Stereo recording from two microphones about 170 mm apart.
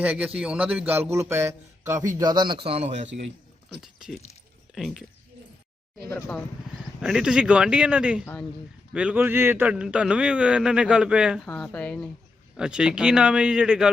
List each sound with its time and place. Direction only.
0.0 s speech: 10° right (ahead or behind); by 2.6 s 25° right (ahead or behind)
2.6 s a man's voice: 35° right (ahead or behind)
3.8 s a man's voice: 5° right (ahead or behind)
6.1 s speech: 15° left (ahead or behind)
7.0 s a man's voice: 5° right (ahead or behind)
11.4 s speech: 10° left (ahead or behind)
12.5 s a man's voice: 5° right (ahead or behind)